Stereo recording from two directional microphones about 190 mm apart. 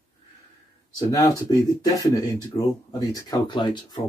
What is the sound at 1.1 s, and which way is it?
Speech, 15° left (ahead or behind).